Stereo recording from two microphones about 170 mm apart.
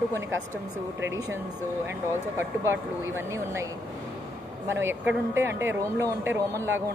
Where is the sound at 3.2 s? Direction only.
15° right (ahead or behind).